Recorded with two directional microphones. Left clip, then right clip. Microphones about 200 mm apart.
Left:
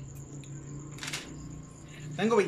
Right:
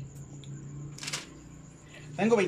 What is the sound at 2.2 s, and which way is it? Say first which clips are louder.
Speech: right 1 dB; 10° right (ahead or behind).